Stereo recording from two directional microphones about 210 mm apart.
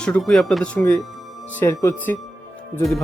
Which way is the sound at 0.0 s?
5° left (ahead or behind).